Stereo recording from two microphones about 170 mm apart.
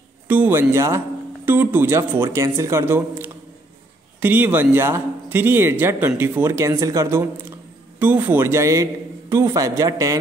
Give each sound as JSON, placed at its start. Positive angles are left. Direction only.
{"t": 0.3, "sound": "speech", "side_deg": -10}